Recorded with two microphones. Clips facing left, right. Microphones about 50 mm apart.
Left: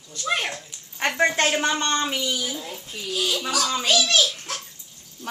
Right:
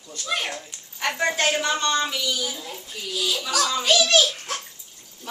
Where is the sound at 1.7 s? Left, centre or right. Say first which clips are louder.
Even; left.